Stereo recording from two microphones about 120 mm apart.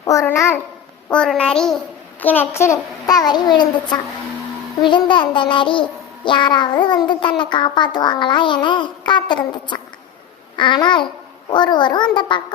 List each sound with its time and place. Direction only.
0.0 s a child's voice: 25° left (ahead or behind)
1.1 s a child's voice: 5° left (ahead or behind)
2.2 s a child's voice: 15° left (ahead or behind); by 12.4 s 40° left (ahead or behind)